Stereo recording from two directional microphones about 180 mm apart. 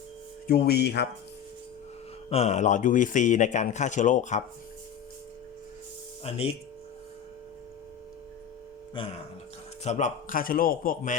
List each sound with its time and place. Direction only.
0.4 s speech: 60° left (ahead or behind)
2.3 s a man's voice: 40° left (ahead or behind)
6.2 s speech: 35° left (ahead or behind)
9.8 s a man's voice: 45° left (ahead or behind)